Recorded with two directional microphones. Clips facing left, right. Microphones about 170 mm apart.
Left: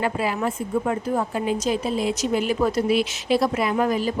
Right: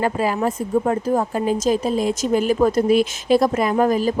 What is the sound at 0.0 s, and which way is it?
A woman's voice, 40° right (ahead or behind).